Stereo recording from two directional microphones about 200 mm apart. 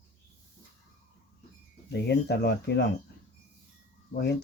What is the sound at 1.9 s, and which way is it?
Speech, 55° left (ahead or behind).